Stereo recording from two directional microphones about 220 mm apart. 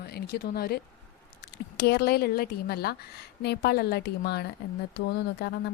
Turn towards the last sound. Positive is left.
turn(degrees=50)  # may be behind; listen again after turning